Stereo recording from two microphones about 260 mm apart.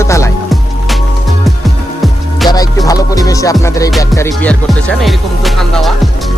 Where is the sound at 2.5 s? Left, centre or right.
Centre.